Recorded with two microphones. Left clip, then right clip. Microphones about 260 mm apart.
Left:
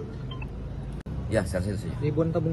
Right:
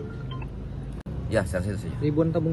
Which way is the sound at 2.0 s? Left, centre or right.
Right.